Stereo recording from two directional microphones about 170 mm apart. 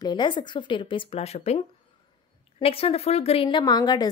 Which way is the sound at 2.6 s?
35° left (ahead or behind).